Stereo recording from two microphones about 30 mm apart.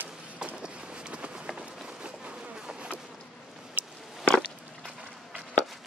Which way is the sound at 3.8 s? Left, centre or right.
Right.